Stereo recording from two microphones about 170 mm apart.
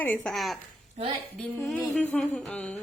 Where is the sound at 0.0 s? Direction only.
5° left (ahead or behind).